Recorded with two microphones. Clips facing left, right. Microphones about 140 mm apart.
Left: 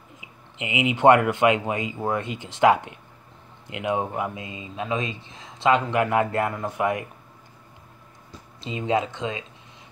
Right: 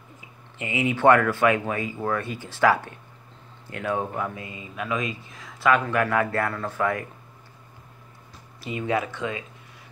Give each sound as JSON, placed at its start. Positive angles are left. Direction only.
{"t": 0.2, "sound": "speech", "side_deg": 15}
{"t": 8.5, "sound": "speech", "side_deg": 20}